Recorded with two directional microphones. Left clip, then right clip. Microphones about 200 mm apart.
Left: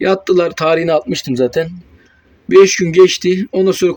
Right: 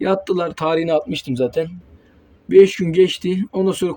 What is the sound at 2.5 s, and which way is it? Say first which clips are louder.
Speech: left 4 dB; 10° right (ahead or behind).